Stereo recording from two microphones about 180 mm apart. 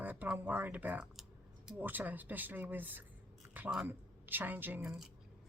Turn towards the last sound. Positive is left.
turn(degrees=-10)  # may be behind; listen again after turning